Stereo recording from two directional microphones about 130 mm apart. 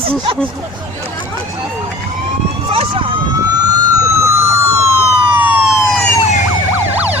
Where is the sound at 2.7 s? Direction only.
45° right (ahead or behind).